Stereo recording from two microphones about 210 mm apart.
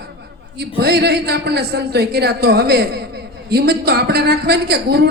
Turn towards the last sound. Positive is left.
turn(degrees=-50)  # may be behind; listen again after turning